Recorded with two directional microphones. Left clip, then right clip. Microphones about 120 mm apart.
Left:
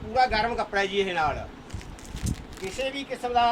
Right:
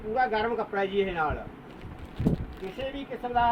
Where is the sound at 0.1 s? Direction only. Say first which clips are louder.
Left 3 dB; centre (ahead or behind).